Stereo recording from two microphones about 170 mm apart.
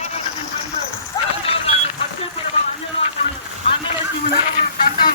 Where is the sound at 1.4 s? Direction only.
35° left (ahead or behind).